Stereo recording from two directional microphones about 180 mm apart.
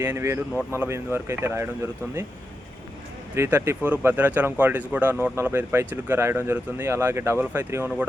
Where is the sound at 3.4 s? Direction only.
15° right (ahead or behind).